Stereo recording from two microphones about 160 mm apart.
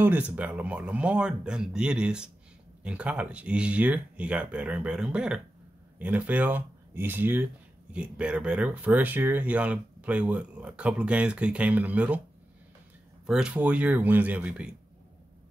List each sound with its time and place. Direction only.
0.0 s speech: 10° right (ahead or behind)
13.3 s speech: 5° right (ahead or behind)